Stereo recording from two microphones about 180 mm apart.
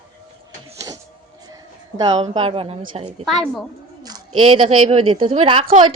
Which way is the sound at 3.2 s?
Centre (ahead or behind).